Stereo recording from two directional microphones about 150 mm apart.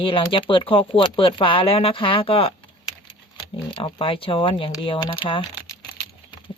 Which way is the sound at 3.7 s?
35° left (ahead or behind).